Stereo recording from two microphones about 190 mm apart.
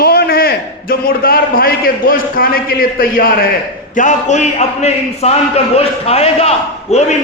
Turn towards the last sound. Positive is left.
turn(degrees=35)  # may be behind; listen again after turning